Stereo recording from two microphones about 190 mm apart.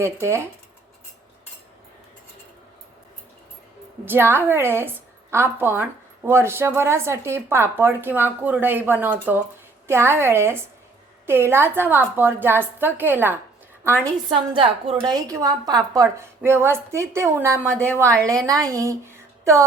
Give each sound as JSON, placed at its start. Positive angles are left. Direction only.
{"t": 0.0, "sound": "a woman's voice", "side_deg": -15}
{"t": 4.0, "sound": "a woman's voice", "side_deg": -10}
{"t": 14.3, "sound": "a woman's voice", "side_deg": -25}